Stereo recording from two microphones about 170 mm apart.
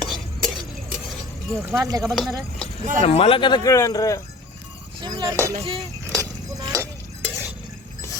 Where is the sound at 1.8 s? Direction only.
20° right (ahead or behind).